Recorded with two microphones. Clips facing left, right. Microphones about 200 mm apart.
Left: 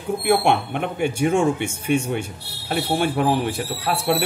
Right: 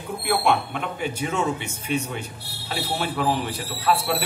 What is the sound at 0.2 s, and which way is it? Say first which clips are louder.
Speech: left 3 dB; 50° left (ahead or behind).